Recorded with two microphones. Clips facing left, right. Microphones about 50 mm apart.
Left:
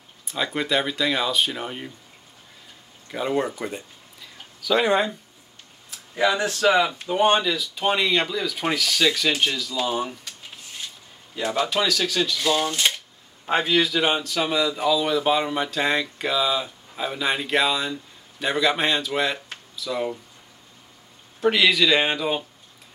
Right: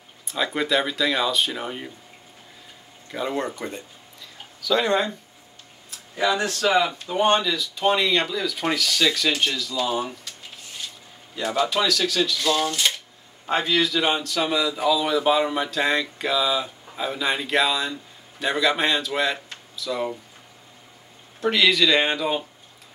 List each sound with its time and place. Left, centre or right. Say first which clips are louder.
0.2 s speech: right 1 dB; centre
3.1 s speech: left 2 dB; centre
6.1 s speech: left 1 dB; centre
11.3 s speech: right 1 dB; centre
21.4 s speech: left 1 dB; centre